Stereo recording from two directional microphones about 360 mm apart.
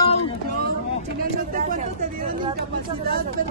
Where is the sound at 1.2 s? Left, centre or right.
Right.